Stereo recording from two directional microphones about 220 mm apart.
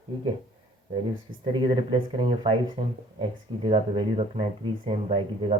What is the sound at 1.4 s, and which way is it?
Speech, 20° right (ahead or behind).